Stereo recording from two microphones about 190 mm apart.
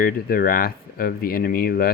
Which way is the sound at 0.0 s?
50° left (ahead or behind).